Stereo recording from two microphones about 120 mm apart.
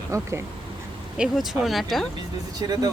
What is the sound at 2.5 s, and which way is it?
Speech, 35° right (ahead or behind).